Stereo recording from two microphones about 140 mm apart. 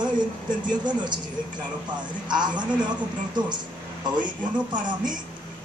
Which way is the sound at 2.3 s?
30° right (ahead or behind).